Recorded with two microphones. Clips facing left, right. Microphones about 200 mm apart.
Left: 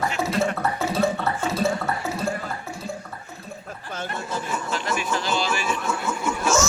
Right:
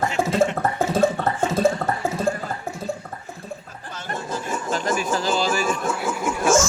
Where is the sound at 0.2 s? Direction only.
50° right (ahead or behind).